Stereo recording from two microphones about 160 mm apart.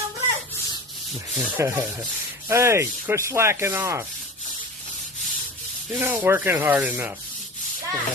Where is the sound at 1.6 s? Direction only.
15° right (ahead or behind).